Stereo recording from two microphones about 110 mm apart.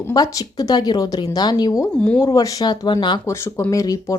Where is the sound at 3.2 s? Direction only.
25° left (ahead or behind).